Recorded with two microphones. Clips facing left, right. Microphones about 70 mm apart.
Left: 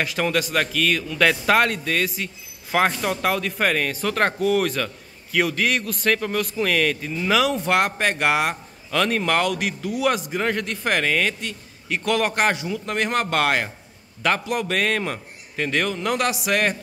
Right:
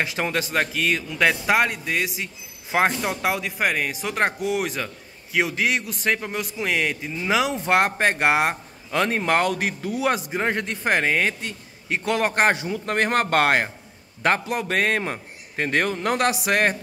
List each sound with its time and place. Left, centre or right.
0.0 s a man's voice: right